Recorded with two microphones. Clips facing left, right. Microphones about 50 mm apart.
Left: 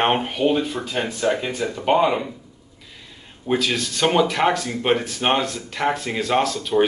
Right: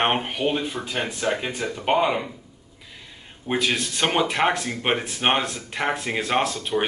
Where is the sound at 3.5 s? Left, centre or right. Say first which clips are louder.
Left 1 dB; right.